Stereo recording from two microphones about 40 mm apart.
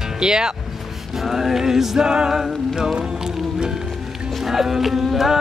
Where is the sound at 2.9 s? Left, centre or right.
Centre.